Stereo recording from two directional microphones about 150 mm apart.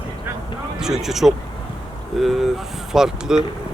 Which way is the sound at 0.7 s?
5° right (ahead or behind).